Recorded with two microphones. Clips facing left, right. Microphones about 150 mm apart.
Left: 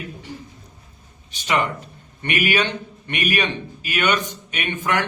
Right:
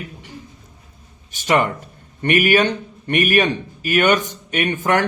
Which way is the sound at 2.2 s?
45° right (ahead or behind).